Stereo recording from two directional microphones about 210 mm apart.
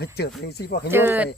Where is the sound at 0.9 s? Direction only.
10° right (ahead or behind).